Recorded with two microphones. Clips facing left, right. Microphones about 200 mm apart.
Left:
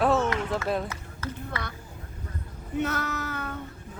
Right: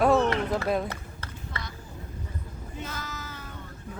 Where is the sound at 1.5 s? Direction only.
60° left (ahead or behind).